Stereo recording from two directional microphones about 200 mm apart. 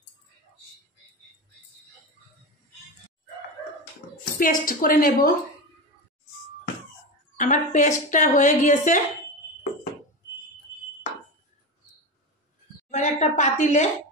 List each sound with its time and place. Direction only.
4.2 s a woman's voice: 45° left (ahead or behind)
7.3 s speech: 40° left (ahead or behind)
12.9 s a sound: 35° left (ahead or behind)